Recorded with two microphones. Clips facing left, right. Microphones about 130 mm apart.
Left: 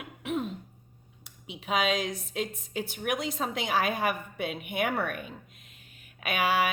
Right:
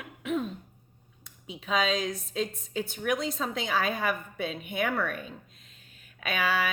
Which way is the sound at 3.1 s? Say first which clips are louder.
Right 1 dB; 55° left (ahead or behind).